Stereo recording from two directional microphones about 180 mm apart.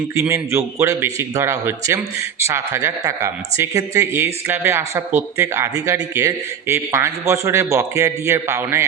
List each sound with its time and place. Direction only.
0.1 s speech: 15° right (ahead or behind)